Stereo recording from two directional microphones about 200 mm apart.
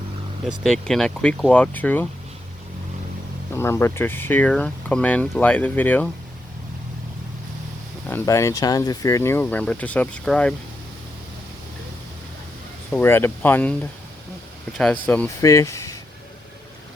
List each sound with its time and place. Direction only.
0.4 s speech: centre (ahead or behind)
3.5 s speech: 15° left (ahead or behind)
8.0 s speech: 10° left (ahead or behind)
12.9 s speech: 10° left (ahead or behind)